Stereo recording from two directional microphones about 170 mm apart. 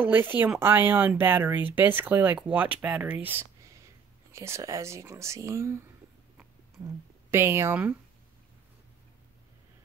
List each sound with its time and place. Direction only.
0.0 s speech: 10° right (ahead or behind)
7.2 s speech: 15° right (ahead or behind)